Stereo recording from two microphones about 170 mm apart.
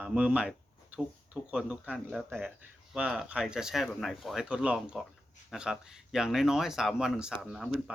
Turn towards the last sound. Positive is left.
turn(degrees=-5)  # may be behind; listen again after turning